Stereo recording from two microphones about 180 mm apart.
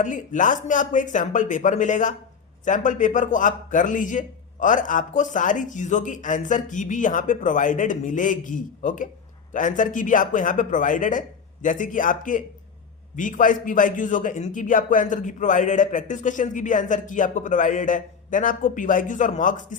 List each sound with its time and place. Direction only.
0.0 s a man's voice: 45° left (ahead or behind)